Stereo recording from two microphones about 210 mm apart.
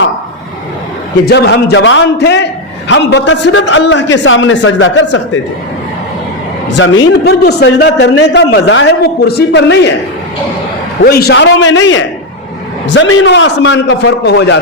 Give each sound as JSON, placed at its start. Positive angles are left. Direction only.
{"t": 1.3, "sound": "a man's voice", "side_deg": 50}
{"t": 6.7, "sound": "a man's voice", "side_deg": 60}
{"t": 11.0, "sound": "a man's voice", "side_deg": 50}